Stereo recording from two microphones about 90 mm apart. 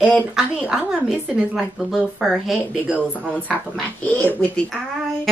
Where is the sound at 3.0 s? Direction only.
15° right (ahead or behind).